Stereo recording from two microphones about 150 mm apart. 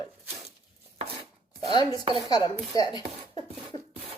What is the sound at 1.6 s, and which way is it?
Chopping, 25° left (ahead or behind).